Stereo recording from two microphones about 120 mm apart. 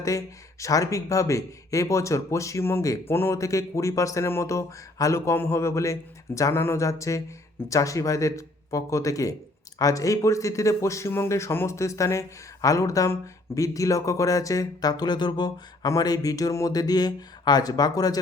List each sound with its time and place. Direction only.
0.6 s speech: 25° left (ahead or behind)